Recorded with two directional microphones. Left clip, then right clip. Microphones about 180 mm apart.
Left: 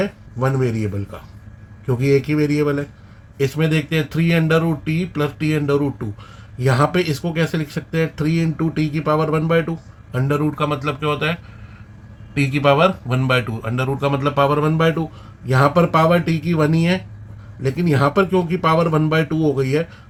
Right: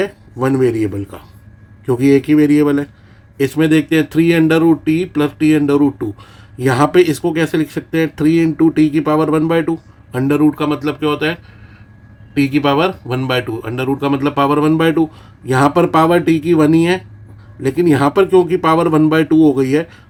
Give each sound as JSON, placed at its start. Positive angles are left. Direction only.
{"t": 0.0, "sound": "speech", "side_deg": -35}